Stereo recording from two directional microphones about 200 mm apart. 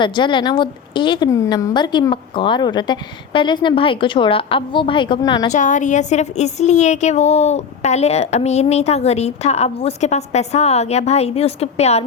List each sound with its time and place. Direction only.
0.0 s a woman's voice: 25° left (ahead or behind)
5.5 s a woman's voice: 35° left (ahead or behind)